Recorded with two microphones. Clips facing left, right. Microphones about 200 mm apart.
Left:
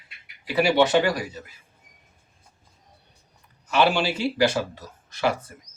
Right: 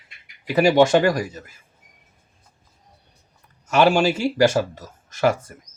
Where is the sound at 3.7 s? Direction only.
45° right (ahead or behind).